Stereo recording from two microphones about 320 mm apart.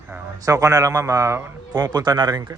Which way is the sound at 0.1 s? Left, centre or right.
Centre.